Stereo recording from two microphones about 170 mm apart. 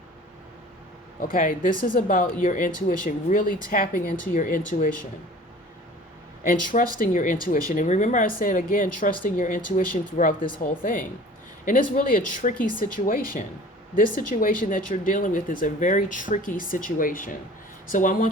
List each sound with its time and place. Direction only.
1.2 s speech: 55° left (ahead or behind)
6.5 s speech: 50° left (ahead or behind)